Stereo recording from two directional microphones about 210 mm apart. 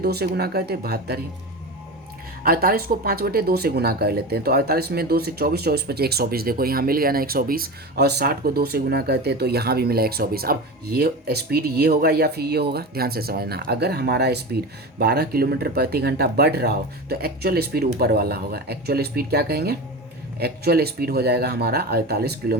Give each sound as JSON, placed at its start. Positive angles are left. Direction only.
{"t": 0.0, "sound": "speech", "side_deg": -50}
{"t": 2.4, "sound": "speech", "side_deg": -45}